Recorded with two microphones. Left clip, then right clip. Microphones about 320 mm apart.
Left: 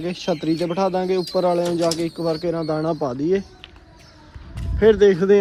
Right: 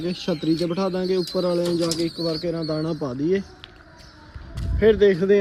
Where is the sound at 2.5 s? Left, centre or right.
Left.